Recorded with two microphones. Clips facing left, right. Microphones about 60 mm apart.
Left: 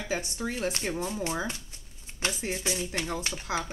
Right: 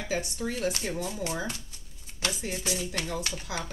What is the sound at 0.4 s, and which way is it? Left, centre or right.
A woman's voice, left.